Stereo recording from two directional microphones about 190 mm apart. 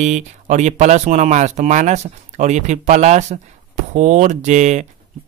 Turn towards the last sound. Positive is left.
turn(degrees=-40)  # may be behind; listen again after turning